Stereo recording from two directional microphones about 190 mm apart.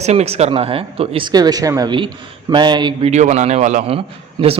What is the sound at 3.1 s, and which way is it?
A man's voice, 40° right (ahead or behind).